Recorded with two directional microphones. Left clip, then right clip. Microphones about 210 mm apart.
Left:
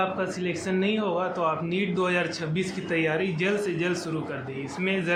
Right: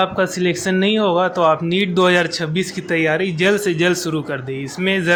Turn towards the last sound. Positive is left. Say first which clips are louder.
# right 8 dB
turn(degrees=-40)  # may be behind; listen again after turning